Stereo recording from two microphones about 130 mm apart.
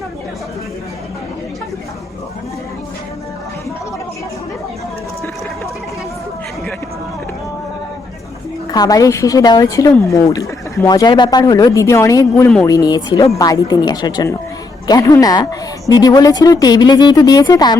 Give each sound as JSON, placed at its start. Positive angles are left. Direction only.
{"t": 8.7, "sound": "speech", "side_deg": 30}